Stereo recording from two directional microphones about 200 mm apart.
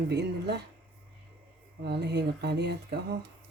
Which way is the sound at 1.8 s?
55° right (ahead or behind).